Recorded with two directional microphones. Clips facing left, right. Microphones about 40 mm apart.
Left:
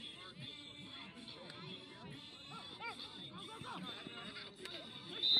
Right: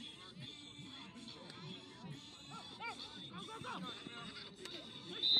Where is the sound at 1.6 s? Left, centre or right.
Centre.